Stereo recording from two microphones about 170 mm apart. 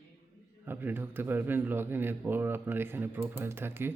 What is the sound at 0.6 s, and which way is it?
Speech, 10° right (ahead or behind).